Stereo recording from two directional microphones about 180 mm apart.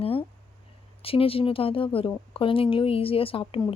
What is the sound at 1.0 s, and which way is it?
Speech, 30° left (ahead or behind).